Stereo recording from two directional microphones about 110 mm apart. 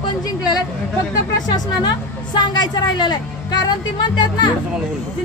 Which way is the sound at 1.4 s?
40° left (ahead or behind).